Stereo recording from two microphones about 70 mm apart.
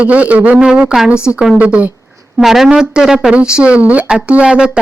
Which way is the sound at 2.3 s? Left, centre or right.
Centre.